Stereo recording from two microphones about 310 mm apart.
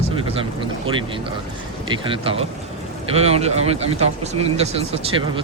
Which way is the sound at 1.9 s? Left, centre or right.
Centre.